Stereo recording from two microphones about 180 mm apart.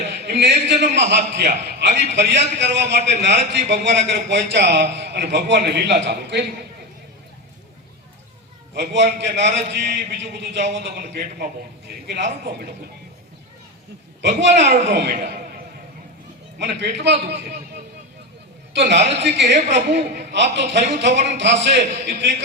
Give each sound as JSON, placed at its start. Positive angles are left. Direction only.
{"t": 0.1, "sound": "a sound", "side_deg": -75}
{"t": 0.7, "sound": "a man's voice", "side_deg": -75}
{"t": 8.7, "sound": "a man's voice", "side_deg": -75}
{"t": 10.8, "sound": "a man's voice", "side_deg": -65}
{"t": 14.2, "sound": "a man's voice", "side_deg": -75}
{"t": 16.6, "sound": "a man's voice", "side_deg": -75}
{"t": 18.7, "sound": "a man's voice", "side_deg": -75}